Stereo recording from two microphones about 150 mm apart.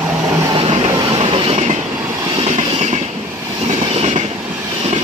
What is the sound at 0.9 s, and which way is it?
Train, 35° right (ahead or behind).